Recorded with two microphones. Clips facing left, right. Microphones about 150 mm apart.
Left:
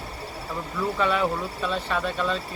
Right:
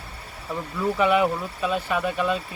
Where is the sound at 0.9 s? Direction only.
15° right (ahead or behind).